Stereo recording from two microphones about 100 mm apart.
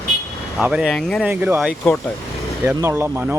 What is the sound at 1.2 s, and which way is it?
Speech, 20° right (ahead or behind).